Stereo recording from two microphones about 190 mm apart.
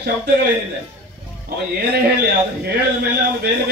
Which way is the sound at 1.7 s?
60° right (ahead or behind).